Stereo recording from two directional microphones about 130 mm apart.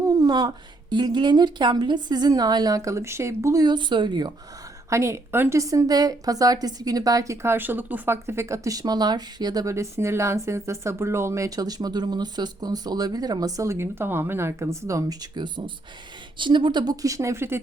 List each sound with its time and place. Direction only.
0.0 s a woman's voice: 30° right (ahead or behind)
4.9 s a woman's voice: 20° right (ahead or behind)